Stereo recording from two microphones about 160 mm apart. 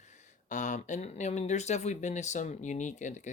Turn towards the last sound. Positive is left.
turn(degrees=50)  # may be behind; listen again after turning